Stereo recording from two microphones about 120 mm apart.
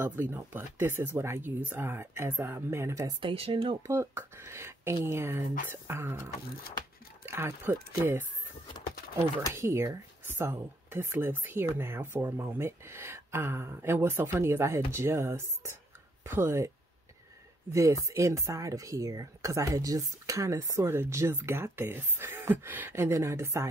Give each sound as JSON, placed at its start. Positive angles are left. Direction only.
{"t": 0.0, "sound": "speech", "side_deg": -15}
{"t": 3.2, "sound": "speech", "side_deg": -50}
{"t": 3.8, "sound": "speech", "side_deg": -20}
{"t": 7.2, "sound": "speech", "side_deg": -20}
{"t": 9.5, "sound": "speech", "side_deg": -20}
{"t": 17.7, "sound": "speech", "side_deg": -25}